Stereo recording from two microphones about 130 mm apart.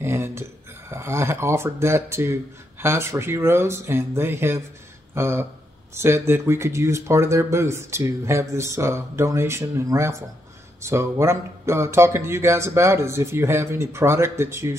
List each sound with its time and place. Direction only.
0.0 s speech: 20° right (ahead or behind)